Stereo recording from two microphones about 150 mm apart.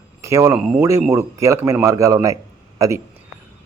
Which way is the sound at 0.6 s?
5° right (ahead or behind).